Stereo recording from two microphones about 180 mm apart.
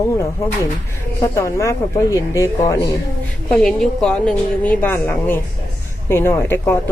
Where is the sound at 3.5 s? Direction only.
5° left (ahead or behind).